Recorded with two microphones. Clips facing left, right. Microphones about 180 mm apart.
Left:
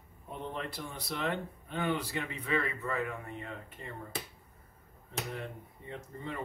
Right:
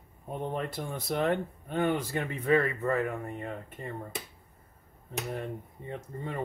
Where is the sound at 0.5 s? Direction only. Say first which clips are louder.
Right 6 dB; 50° right (ahead or behind).